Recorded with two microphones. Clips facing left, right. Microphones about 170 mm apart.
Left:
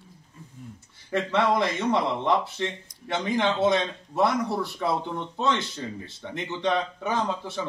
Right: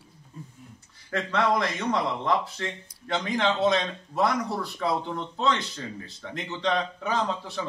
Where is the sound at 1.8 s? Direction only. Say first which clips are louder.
Left 1 dB; 20° left (ahead or behind).